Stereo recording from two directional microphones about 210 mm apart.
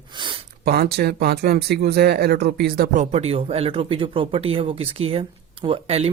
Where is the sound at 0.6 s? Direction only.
45° right (ahead or behind).